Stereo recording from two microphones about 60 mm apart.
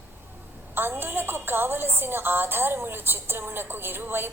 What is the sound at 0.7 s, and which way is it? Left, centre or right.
A woman's voice, right.